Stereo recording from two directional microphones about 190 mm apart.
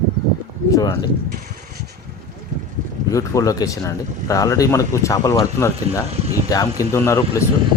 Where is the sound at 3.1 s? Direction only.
15° left (ahead or behind).